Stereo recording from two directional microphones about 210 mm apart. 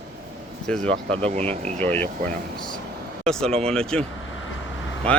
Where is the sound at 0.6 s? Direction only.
5° left (ahead or behind).